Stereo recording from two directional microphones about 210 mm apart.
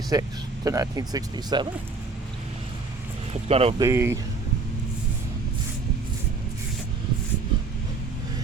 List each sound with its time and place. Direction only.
0.1 s speech: 15° right (ahead or behind)
3.5 s speech: 30° right (ahead or behind)
3.8 s speech: 10° right (ahead or behind)